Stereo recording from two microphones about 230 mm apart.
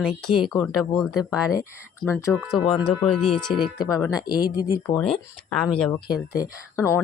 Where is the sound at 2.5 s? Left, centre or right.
Left.